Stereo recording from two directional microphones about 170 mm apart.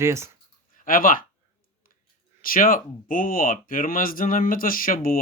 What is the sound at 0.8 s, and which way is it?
Speech, 55° left (ahead or behind).